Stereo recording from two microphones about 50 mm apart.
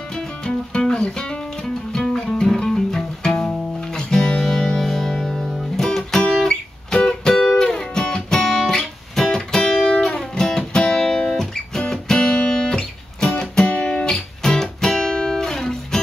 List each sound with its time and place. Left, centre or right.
0.1 s music: centre
13.7 s guitar: left
14.1 s music: centre